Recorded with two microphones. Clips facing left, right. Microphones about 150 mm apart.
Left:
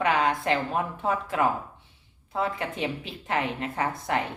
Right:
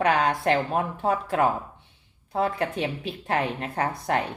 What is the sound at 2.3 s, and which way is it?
Speech, 35° right (ahead or behind).